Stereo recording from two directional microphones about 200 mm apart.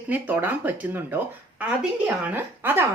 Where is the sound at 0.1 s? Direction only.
10° right (ahead or behind).